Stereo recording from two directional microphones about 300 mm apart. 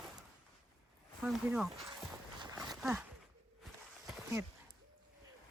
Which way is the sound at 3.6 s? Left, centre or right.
Centre.